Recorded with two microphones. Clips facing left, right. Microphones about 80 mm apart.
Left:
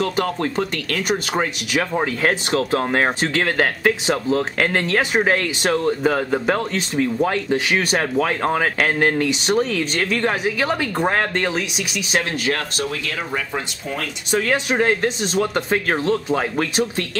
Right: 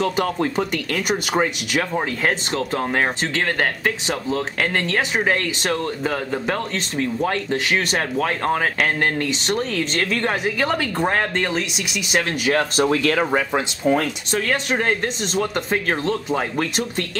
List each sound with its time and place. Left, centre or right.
0.0 s speech: centre
2.5 s speech: centre
12.7 s speech: right
14.3 s speech: centre